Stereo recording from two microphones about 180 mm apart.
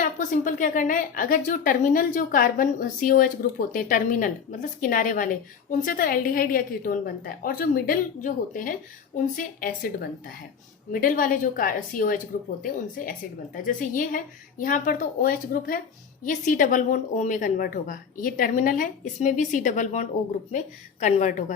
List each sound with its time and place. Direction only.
0.0 s a woman's voice: 45° left (ahead or behind)